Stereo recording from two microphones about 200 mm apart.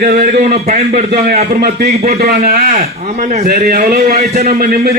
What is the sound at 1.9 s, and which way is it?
Speech, 30° right (ahead or behind).